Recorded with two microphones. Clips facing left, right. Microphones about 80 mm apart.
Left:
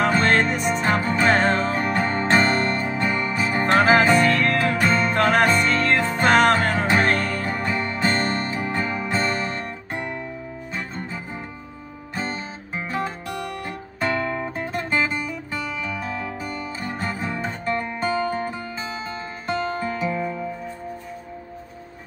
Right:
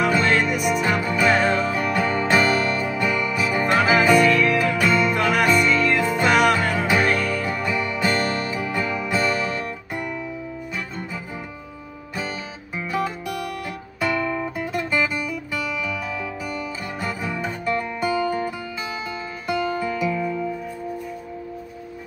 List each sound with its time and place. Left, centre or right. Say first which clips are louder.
0.0 s music: left 1 dB; left
12.2 s music: left 1 dB; left